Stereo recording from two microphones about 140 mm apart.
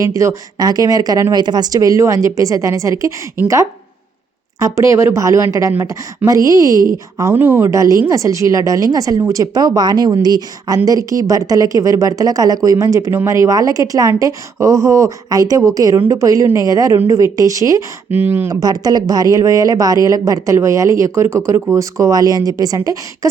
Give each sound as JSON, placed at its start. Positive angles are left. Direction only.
{"t": 0.0, "sound": "speech", "side_deg": -20}
{"t": 18.6, "sound": "speech", "side_deg": -30}